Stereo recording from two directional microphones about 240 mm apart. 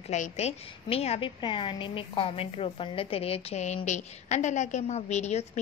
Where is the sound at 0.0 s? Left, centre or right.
Left.